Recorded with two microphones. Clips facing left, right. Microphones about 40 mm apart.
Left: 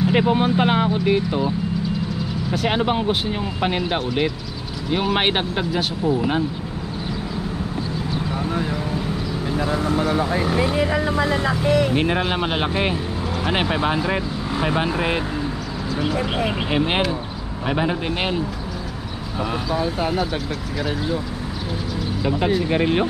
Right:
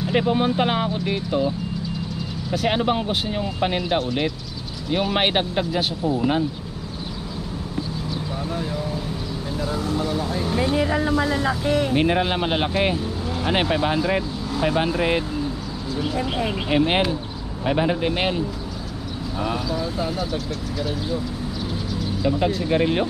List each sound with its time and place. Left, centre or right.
0.0 s speech: centre
2.5 s speech: centre
8.1 s speech: left
11.9 s speech: centre
16.6 s speech: centre
19.7 s speech: left
22.2 s speech: centre